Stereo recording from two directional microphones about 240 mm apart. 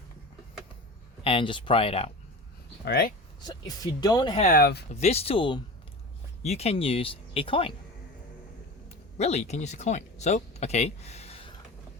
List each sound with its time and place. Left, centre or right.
1.2 s speech: left
2.8 s speech: left
3.4 s speech: centre
4.4 s speech: left
9.1 s speech: left